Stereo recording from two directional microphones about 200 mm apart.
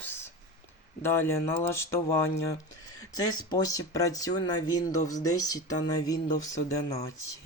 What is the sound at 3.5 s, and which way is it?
Speech, 15° left (ahead or behind).